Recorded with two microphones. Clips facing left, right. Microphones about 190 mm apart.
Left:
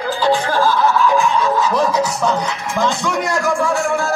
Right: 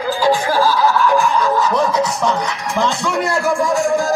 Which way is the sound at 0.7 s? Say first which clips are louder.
Even; 10° right (ahead or behind).